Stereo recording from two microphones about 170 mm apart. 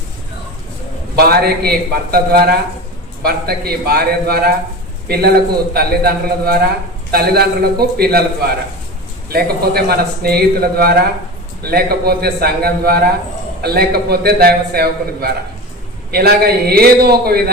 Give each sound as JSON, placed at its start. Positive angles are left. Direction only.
{"t": 1.1, "sound": "a man's voice", "side_deg": -65}
{"t": 9.3, "sound": "a man's voice", "side_deg": -65}